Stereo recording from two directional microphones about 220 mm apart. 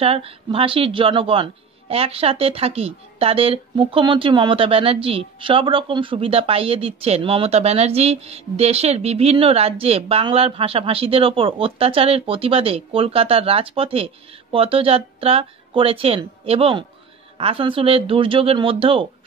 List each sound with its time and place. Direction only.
0.0 s a woman's voice: 25° right (ahead or behind)